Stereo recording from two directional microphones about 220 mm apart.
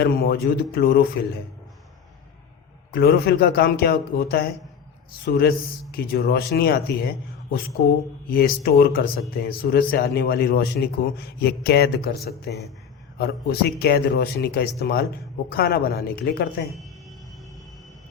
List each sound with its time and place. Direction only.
0.0 s a man's voice: 45° left (ahead or behind)
2.9 s a man's voice: 45° left (ahead or behind)
8.3 s a man's voice: 45° left (ahead or behind)